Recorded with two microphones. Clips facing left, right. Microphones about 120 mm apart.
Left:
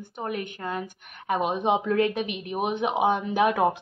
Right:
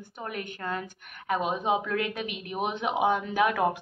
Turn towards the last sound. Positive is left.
turn(degrees=20)  # may be behind; listen again after turning